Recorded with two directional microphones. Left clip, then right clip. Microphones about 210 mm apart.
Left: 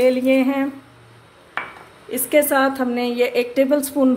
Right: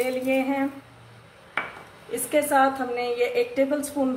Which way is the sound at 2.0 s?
50° left (ahead or behind).